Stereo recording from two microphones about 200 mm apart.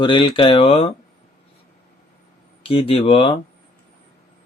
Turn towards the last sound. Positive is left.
turn(degrees=30)  # may be behind; listen again after turning